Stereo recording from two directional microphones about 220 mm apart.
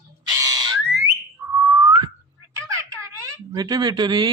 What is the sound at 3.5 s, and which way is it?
Speech, 20° right (ahead or behind).